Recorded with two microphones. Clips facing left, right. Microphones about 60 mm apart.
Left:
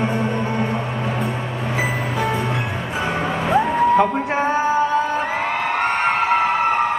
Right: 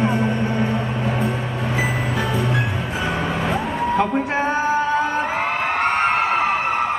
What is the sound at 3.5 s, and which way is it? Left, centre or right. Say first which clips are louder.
Music: left 9 dB; left.